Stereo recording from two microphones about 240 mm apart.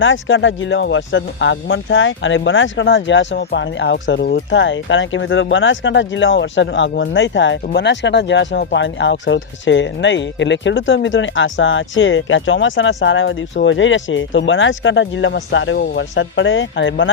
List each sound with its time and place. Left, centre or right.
0.0 s speech: left